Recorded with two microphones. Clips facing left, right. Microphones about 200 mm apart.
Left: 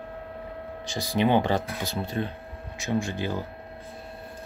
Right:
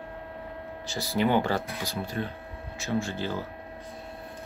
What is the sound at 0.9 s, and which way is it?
Speech, 15° left (ahead or behind).